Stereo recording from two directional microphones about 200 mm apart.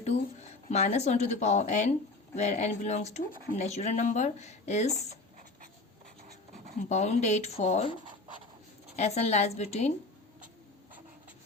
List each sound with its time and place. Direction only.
0.7 s speech: 35° left (ahead or behind)
6.8 s speech: 35° left (ahead or behind)
9.0 s speech: 30° left (ahead or behind)